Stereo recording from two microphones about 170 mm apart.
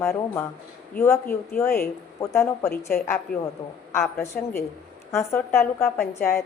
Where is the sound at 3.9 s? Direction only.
15° left (ahead or behind).